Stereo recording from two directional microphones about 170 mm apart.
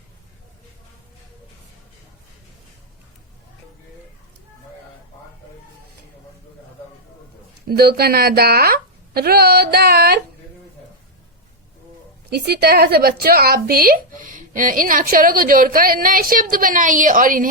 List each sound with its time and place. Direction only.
7.7 s a woman's voice: 65° right (ahead or behind)
12.3 s a woman's voice: 70° right (ahead or behind); by 17.5 s 55° right (ahead or behind)